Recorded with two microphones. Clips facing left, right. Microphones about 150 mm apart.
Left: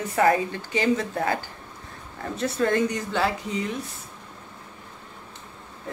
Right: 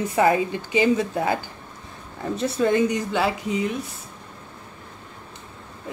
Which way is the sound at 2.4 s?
15° right (ahead or behind).